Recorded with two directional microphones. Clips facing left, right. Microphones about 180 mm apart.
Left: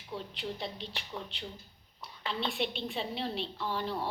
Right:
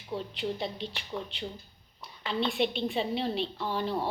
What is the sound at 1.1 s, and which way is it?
Speech, 20° right (ahead or behind).